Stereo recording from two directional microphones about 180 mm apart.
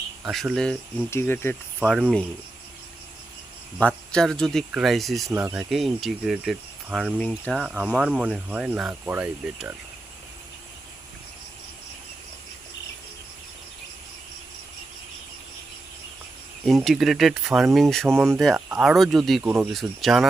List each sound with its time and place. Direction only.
0.5 s speech: centre (ahead or behind)
3.8 s speech: 5° left (ahead or behind)
16.6 s speech: centre (ahead or behind)